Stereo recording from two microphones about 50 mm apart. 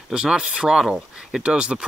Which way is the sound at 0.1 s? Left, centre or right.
Centre.